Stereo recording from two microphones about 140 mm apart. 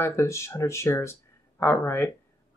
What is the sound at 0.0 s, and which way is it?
Speech, 20° left (ahead or behind).